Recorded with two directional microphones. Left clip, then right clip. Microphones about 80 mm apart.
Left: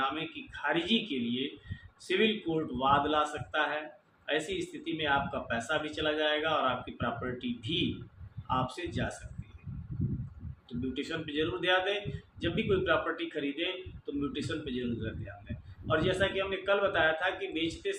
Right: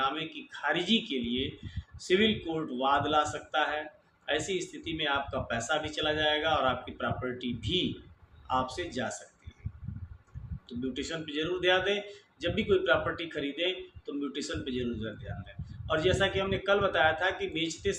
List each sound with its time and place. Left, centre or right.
0.0 s speech: right
10.7 s speech: right